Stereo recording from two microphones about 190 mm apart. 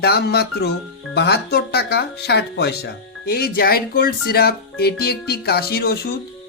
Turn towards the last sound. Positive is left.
turn(degrees=55)  # may be behind; listen again after turning